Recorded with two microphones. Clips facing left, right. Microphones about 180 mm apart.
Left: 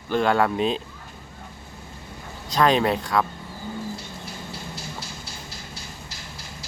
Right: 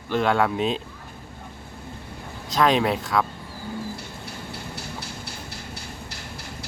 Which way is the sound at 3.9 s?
60° right (ahead or behind).